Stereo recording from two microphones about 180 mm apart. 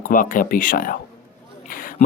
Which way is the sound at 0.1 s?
50° left (ahead or behind).